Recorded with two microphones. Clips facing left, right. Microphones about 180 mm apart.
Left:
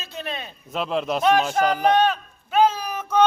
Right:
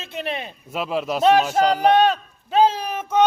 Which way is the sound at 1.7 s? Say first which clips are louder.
Right 3 dB; 35° right (ahead or behind).